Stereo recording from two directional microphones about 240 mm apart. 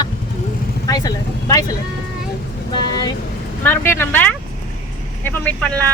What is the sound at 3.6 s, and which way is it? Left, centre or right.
Speech, centre.